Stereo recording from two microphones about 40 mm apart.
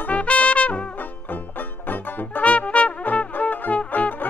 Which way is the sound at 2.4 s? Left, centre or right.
Left.